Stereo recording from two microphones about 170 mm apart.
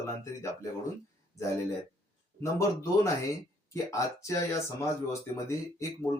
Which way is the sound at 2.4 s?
20° left (ahead or behind).